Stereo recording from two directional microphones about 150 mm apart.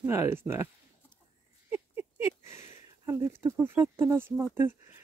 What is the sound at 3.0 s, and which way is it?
Speech, 15° right (ahead or behind).